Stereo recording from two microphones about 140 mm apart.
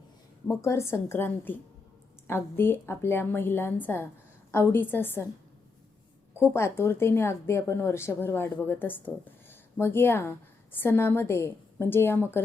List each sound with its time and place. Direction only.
0.6 s a woman's voice: 20° left (ahead or behind)
6.5 s a woman's voice: 20° left (ahead or behind)